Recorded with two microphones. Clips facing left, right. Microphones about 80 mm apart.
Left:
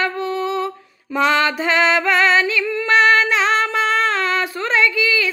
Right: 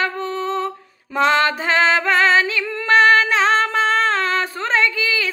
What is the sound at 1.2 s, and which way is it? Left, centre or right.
Female singing, right.